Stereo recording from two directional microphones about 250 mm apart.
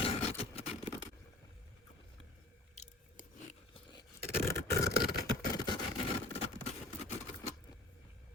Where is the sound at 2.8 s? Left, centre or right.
Left.